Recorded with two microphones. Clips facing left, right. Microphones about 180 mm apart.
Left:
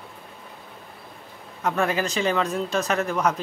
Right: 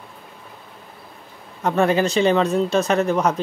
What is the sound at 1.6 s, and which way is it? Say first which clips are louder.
Speech: right 6 dB; 30° right (ahead or behind).